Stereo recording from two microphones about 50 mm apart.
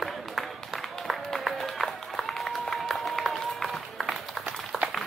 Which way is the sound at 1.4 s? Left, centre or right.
Centre.